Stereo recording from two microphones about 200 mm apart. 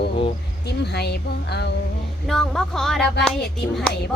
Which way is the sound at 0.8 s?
55° left (ahead or behind).